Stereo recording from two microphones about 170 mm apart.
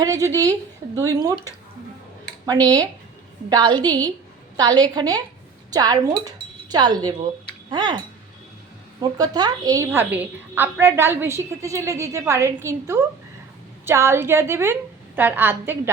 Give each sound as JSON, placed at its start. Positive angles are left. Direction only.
{"t": 0.0, "sound": "a woman's voice", "side_deg": -20}
{"t": 3.5, "sound": "a woman's voice", "side_deg": -25}